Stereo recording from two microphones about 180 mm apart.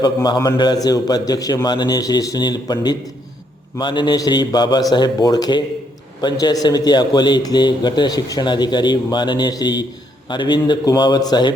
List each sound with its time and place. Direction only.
0.0 s a man's voice: 25° left (ahead or behind)